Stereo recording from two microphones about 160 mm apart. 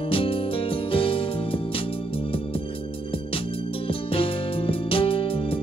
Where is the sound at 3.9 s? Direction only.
35° left (ahead or behind).